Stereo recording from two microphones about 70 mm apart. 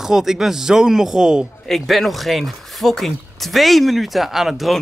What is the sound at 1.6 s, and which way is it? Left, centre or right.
Speech, centre.